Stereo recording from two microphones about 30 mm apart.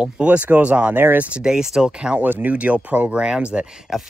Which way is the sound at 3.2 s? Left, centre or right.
Right.